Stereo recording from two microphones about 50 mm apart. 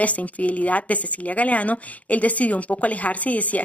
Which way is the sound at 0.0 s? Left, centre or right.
Left.